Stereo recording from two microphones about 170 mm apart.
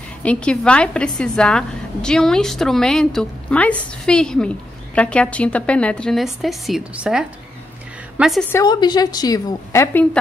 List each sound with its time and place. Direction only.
0.2 s a woman's voice: 5° left (ahead or behind)
8.5 s a woman's voice: 20° left (ahead or behind)